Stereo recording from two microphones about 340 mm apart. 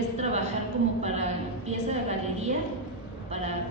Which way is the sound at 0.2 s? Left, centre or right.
Centre.